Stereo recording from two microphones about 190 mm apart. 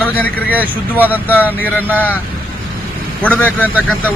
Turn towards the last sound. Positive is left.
turn(degrees=10)  # may be behind; listen again after turning